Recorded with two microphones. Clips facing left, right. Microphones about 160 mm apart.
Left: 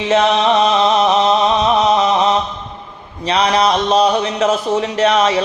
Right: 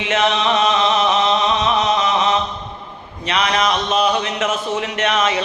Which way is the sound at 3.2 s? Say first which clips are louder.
Left 4 dB; 35° left (ahead or behind).